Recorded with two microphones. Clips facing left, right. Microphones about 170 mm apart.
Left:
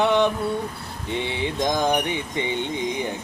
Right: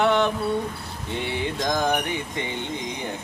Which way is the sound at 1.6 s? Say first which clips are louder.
Left 2 dB; 20° left (ahead or behind).